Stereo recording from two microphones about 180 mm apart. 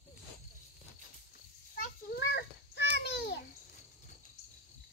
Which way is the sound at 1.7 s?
65° left (ahead or behind).